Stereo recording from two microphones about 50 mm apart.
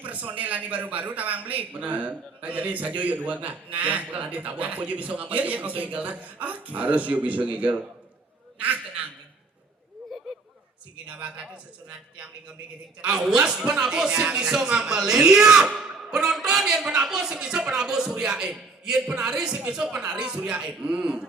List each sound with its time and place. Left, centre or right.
0.0 s a man's voice: right
8.5 s a sound: right
11.0 s a man's voice: right